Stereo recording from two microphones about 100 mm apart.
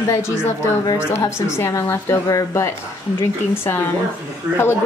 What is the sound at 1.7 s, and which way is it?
Speech, 25° left (ahead or behind).